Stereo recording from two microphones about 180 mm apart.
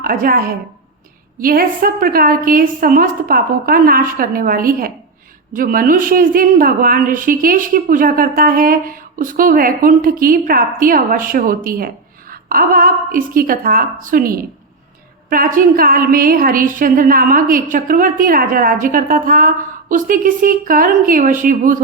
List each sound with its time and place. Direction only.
0.0 s a woman's voice: 50° right (ahead or behind)